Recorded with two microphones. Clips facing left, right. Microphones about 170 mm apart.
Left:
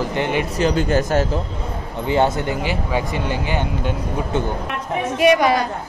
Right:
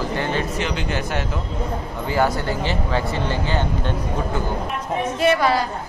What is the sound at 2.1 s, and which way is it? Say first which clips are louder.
Speech: left 3 dB; 20° left (ahead or behind).